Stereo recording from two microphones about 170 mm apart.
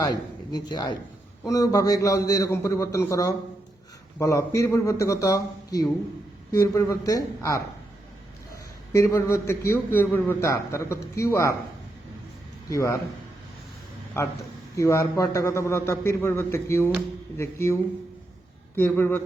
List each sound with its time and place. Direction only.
0.0 s a man's voice: 25° left (ahead or behind)
8.9 s a man's voice: 20° left (ahead or behind)
12.7 s a man's voice: 15° left (ahead or behind)
14.2 s a man's voice: 15° left (ahead or behind)
18.8 s a man's voice: 10° left (ahead or behind)